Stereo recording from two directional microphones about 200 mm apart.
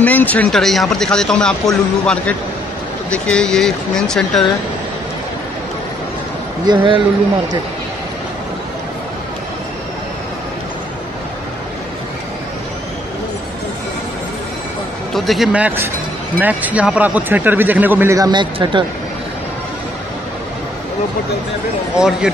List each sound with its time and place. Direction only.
0.0 s speech: 10° left (ahead or behind)
6.6 s speech: 25° right (ahead or behind)
15.1 s speech: centre (ahead or behind); by 18.9 s 25° right (ahead or behind)
21.9 s speech: 5° right (ahead or behind)